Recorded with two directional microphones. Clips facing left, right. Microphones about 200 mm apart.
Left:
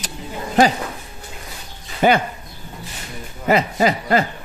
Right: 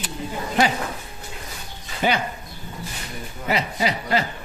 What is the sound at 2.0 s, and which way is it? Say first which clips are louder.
Speech: left 7 dB; 50° left (ahead or behind).